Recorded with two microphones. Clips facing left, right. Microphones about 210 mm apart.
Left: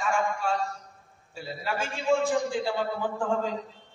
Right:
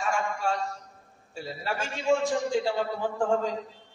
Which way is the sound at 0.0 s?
40° right (ahead or behind).